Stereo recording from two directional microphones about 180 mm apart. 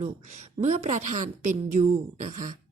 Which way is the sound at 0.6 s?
35° right (ahead or behind).